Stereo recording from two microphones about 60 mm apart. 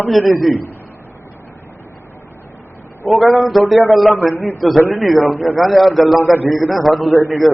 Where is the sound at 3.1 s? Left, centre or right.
Centre.